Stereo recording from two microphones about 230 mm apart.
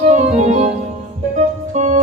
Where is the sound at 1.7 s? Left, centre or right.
Right.